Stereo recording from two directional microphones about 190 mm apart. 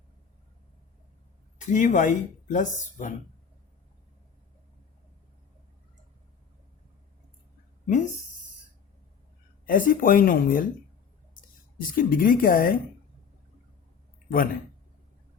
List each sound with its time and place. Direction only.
1.6 s speech: 40° left (ahead or behind)
7.9 s speech: 40° left (ahead or behind)
9.6 s speech: 45° left (ahead or behind)